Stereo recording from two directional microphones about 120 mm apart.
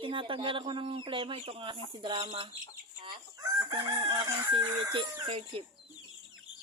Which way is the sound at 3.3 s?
35° right (ahead or behind).